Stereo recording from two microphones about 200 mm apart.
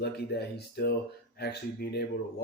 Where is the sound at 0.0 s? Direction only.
55° left (ahead or behind).